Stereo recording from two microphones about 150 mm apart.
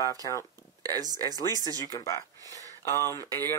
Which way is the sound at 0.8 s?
25° right (ahead or behind).